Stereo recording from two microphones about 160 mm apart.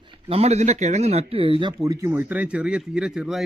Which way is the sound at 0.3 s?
40° right (ahead or behind).